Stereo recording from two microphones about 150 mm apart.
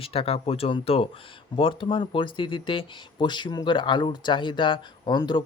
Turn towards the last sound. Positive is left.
turn(degrees=30)  # may be behind; listen again after turning